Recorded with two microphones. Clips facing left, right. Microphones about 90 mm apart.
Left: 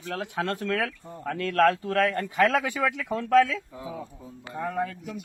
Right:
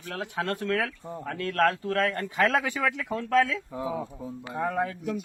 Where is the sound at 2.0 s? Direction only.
30° right (ahead or behind).